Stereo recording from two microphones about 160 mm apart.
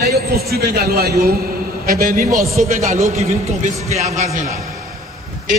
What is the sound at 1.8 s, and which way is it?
A man's voice, 60° right (ahead or behind).